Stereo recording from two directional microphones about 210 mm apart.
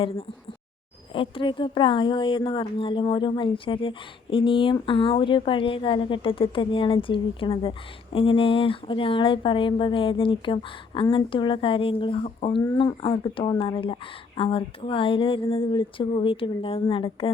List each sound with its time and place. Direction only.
1.1 s speech: 25° left (ahead or behind)